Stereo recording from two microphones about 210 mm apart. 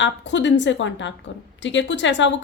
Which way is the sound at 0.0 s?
60° left (ahead or behind).